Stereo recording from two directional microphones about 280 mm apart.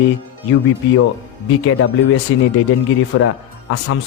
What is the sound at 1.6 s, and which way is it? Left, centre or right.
A man's voice, left.